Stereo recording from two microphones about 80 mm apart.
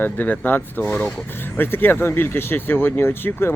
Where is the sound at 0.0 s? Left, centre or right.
Left.